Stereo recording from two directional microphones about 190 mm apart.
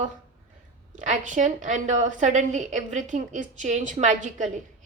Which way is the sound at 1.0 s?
40° right (ahead or behind).